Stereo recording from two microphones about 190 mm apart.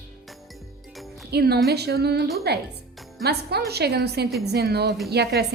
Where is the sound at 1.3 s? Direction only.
55° right (ahead or behind).